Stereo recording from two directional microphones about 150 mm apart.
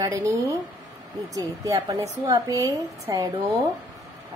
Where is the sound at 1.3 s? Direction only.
20° right (ahead or behind).